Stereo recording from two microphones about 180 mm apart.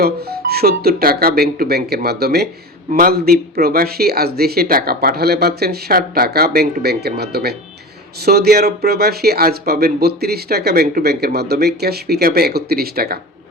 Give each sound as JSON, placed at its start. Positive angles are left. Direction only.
{"t": 0.0, "sound": "speech", "side_deg": -60}